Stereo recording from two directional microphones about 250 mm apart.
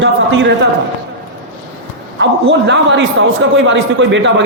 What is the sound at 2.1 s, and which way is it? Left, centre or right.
A man's voice, right.